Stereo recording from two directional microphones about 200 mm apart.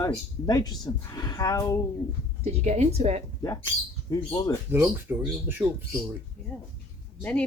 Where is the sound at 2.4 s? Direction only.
30° right (ahead or behind).